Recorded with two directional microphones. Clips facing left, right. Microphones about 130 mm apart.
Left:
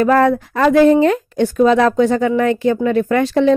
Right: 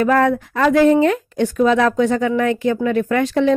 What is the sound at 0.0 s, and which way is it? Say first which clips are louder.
Speech: left 3 dB; 35° left (ahead or behind).